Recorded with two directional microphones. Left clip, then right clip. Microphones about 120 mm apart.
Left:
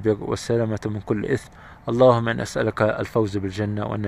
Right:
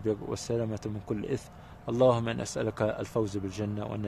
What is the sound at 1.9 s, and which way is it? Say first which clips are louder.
Speech: left 8 dB; 40° left (ahead or behind).